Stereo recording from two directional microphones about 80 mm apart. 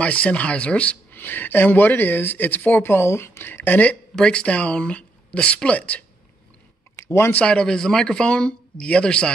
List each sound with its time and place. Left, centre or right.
0.0 s speech: centre
4.1 s speech: centre
7.0 s speech: left
7.3 s speech: centre